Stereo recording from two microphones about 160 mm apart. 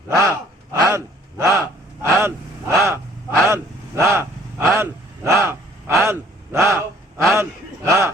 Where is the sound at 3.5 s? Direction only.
15° right (ahead or behind).